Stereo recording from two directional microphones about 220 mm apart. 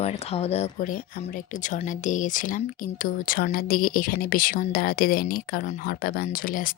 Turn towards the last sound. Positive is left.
turn(degrees=40)  # may be behind; listen again after turning